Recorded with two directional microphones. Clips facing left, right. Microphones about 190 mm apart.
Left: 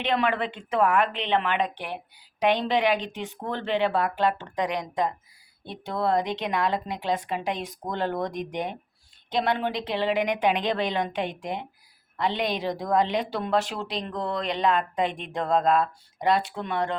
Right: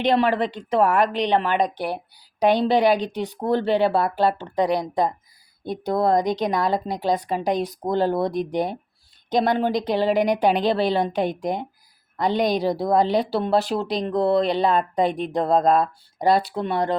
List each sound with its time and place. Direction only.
0.0 s speech: 35° right (ahead or behind)